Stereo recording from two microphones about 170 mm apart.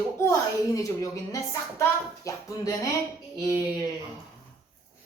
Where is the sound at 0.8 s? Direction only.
20° left (ahead or behind).